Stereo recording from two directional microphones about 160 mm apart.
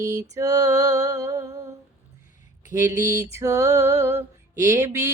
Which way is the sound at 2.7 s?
20° right (ahead or behind).